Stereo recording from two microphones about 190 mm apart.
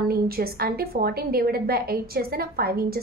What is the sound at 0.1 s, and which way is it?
A woman's voice, 55° right (ahead or behind).